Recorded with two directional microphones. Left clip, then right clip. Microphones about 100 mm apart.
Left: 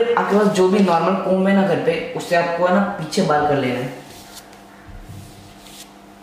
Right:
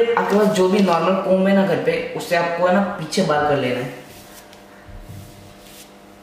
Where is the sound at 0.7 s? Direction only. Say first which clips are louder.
Left 1 dB; 15° left (ahead or behind).